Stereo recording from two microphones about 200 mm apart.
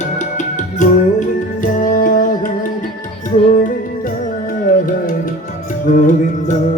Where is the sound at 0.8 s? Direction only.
40° left (ahead or behind).